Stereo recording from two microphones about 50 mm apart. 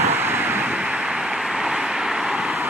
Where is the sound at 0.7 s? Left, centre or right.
Right.